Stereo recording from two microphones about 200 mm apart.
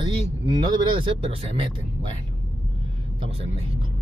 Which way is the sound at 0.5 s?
20° right (ahead or behind).